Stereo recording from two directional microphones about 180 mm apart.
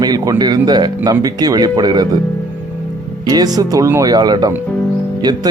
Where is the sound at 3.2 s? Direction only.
20° right (ahead or behind).